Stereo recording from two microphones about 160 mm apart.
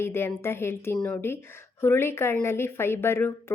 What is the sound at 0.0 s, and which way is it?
A woman's voice, 15° left (ahead or behind).